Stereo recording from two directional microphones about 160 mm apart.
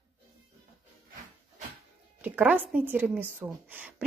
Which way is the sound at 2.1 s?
10° right (ahead or behind).